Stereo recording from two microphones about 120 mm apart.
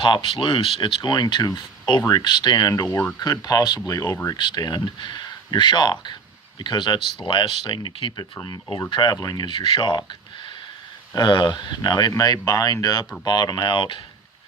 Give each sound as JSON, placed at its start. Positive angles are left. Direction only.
{"t": 0.0, "sound": "speech", "side_deg": 45}
{"t": 4.4, "sound": "speech", "side_deg": 40}
{"t": 11.1, "sound": "speech", "side_deg": 40}